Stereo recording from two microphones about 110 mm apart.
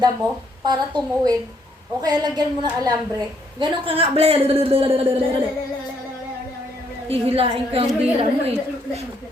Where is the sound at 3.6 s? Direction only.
55° right (ahead or behind).